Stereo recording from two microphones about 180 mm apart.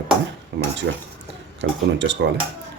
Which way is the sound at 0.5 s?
70° right (ahead or behind).